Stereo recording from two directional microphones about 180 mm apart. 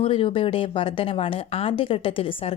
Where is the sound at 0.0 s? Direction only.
30° left (ahead or behind).